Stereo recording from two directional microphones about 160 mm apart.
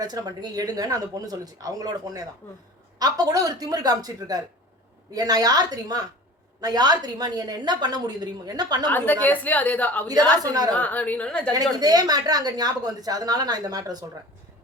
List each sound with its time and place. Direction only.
0.0 s speech: 25° right (ahead or behind)
2.4 s a woman's voice: 15° left (ahead or behind)
3.0 s speech: 25° right (ahead or behind)
8.9 s a woman's voice: 10° left (ahead or behind)
10.4 s speech: 25° right (ahead or behind)
10.8 s a woman's voice: 10° left (ahead or behind)
11.5 s speech: 25° right (ahead or behind)